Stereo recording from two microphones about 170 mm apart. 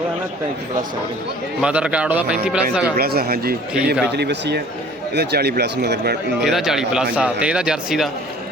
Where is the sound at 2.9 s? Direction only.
65° right (ahead or behind).